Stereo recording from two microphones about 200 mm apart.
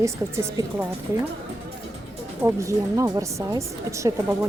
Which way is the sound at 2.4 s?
15° right (ahead or behind).